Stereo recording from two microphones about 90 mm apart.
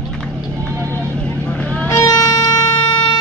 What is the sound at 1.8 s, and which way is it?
Music, 40° left (ahead or behind).